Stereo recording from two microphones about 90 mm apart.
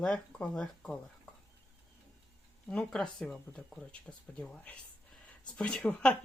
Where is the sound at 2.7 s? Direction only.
10° left (ahead or behind).